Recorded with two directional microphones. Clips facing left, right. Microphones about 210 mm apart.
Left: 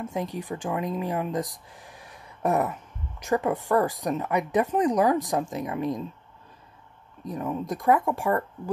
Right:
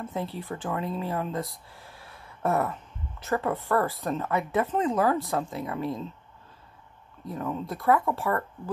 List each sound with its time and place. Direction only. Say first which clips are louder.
0.0 s speech: left 2 dB; 15° left (ahead or behind)
7.2 s speech: left 2 dB; 15° left (ahead or behind)